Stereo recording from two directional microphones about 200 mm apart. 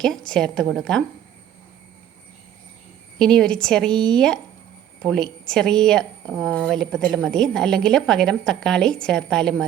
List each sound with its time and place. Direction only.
0.0 s a woman's voice: 5° left (ahead or behind)
3.2 s a woman's voice: 5° left (ahead or behind)